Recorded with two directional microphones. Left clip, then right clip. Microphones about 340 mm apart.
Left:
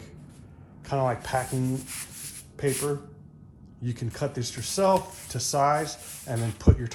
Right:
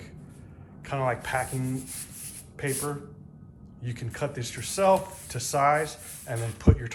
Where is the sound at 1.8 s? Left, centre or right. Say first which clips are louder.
Left 3 dB; centre.